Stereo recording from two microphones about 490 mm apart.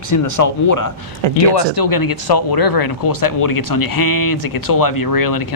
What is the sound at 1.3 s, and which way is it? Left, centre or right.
Speech, left.